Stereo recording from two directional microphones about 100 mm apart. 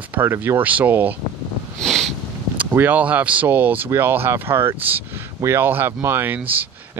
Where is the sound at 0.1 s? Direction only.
20° right (ahead or behind).